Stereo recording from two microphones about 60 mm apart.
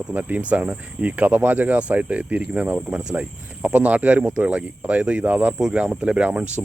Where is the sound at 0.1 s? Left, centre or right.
Right.